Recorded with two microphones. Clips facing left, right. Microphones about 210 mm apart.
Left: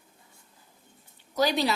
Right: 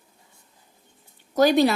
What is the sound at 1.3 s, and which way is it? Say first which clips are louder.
Speech: right 8 dB; 50° right (ahead or behind).